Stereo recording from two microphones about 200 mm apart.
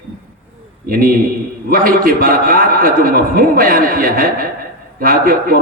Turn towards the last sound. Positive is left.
turn(degrees=-45)  # may be behind; listen again after turning